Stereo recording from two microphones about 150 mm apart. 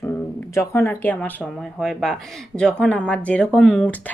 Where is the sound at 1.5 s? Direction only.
Centre (ahead or behind).